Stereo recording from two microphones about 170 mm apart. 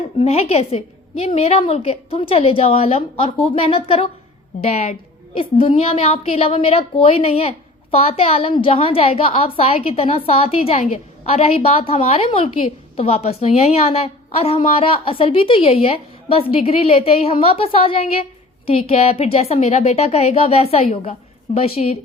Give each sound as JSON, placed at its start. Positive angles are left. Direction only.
{"t": 0.2, "sound": "a woman's voice", "side_deg": 40}